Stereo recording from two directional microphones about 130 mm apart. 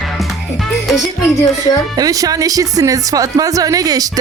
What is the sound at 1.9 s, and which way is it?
Speech, 30° right (ahead or behind).